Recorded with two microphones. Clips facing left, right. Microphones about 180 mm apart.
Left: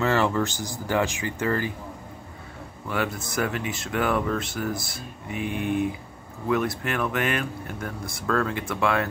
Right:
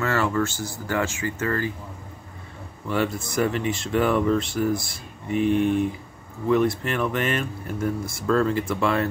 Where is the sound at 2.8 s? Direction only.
Centre (ahead or behind).